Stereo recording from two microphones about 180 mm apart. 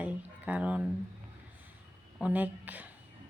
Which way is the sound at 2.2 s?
10° right (ahead or behind).